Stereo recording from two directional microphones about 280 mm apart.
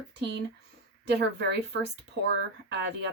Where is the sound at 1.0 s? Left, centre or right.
Right.